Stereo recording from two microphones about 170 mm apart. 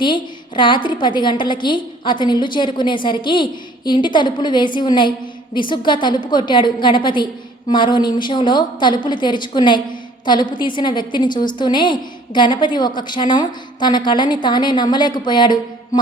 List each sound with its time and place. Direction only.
0.0 s a woman's voice: 30° left (ahead or behind)